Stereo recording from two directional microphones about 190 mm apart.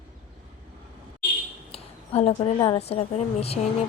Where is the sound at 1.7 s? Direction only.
30° left (ahead or behind).